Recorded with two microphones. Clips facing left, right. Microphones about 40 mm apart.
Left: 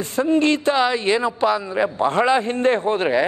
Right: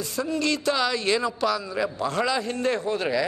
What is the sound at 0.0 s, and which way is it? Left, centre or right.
A man's voice, left.